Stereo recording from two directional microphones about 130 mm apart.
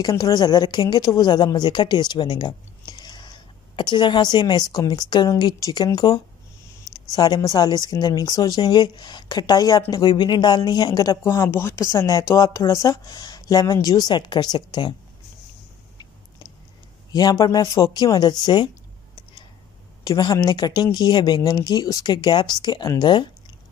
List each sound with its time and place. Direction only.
0.1 s a woman's voice: 30° left (ahead or behind)
17.1 s speech: 30° left (ahead or behind)
20.0 s speech: 30° left (ahead or behind)